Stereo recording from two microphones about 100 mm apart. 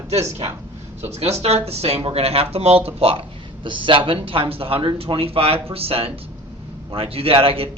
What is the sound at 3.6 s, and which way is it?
A man's voice, 55° right (ahead or behind).